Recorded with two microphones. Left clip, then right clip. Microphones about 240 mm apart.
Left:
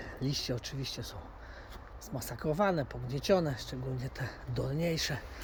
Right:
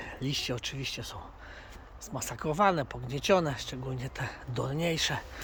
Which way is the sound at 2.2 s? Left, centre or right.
Centre.